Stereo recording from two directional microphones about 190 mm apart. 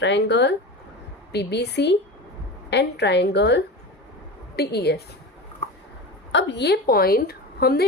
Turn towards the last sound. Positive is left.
turn(degrees=55)  # may be behind; listen again after turning